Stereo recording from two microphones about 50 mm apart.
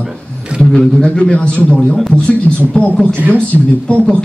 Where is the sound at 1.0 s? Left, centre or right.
Left.